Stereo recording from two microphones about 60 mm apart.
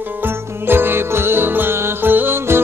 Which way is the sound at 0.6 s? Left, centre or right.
Right.